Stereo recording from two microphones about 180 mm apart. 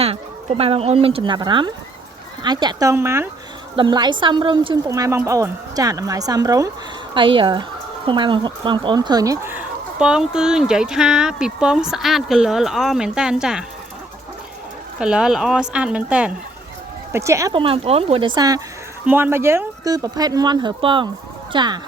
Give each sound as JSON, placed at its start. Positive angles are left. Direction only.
{"t": 0.0, "sound": "a woman's voice", "side_deg": -35}
{"t": 14.9, "sound": "speech", "side_deg": -5}
{"t": 17.5, "sound": "a woman's voice", "side_deg": -30}